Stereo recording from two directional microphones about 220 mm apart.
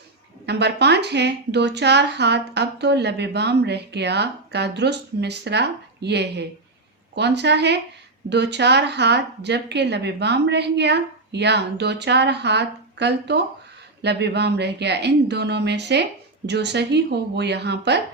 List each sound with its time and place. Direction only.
0.4 s a woman's voice: 50° right (ahead or behind)